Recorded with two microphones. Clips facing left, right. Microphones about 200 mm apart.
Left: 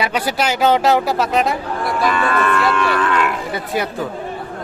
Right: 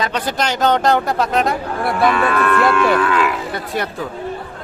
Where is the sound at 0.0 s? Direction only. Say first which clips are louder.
Left 1 dB; 10° left (ahead or behind).